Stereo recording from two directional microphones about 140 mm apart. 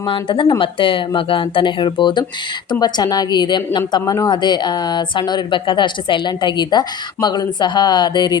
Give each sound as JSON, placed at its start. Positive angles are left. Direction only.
{"t": 0.0, "sound": "a woman's voice", "side_deg": 35}